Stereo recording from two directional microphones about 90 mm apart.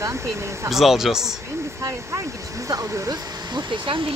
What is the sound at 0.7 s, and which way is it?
Speech, 5° right (ahead or behind).